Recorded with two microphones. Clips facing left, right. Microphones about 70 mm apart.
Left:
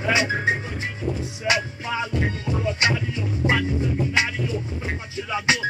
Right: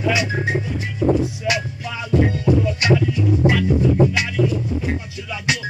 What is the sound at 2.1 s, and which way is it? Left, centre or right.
Music, right.